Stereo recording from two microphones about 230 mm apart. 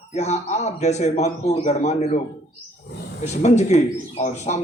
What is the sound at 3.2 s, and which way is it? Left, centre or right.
A man's voice, left.